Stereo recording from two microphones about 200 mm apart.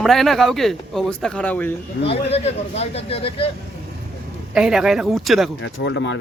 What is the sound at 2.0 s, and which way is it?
Speech, 30° left (ahead or behind).